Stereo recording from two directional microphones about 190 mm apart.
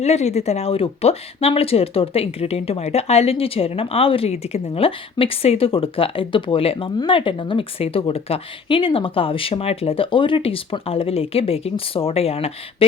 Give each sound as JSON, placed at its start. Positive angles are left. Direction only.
{"t": 0.0, "sound": "speech", "side_deg": 35}